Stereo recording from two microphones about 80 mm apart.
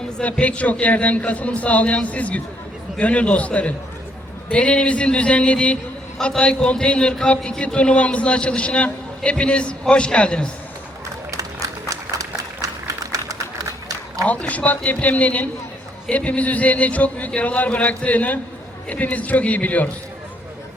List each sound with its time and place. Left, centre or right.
0.2 s a man's voice: centre
11.3 s run: right
14.3 s speech: centre